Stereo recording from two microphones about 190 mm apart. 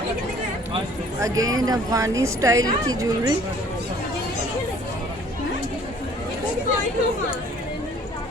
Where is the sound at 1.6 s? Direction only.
20° right (ahead or behind).